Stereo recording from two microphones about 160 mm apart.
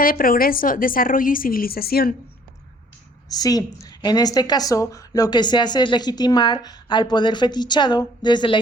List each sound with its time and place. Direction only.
0.0 s a woman's voice: 60° left (ahead or behind)
3.3 s speech: 25° left (ahead or behind)